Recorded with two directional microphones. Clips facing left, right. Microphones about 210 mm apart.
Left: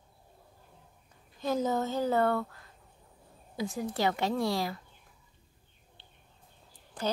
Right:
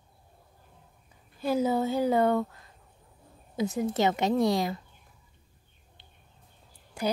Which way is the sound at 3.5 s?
20° right (ahead or behind).